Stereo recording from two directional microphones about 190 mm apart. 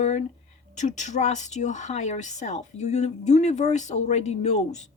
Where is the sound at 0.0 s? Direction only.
35° left (ahead or behind).